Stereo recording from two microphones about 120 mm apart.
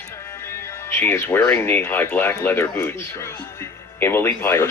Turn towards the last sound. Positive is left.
turn(degrees=20)  # may be behind; listen again after turning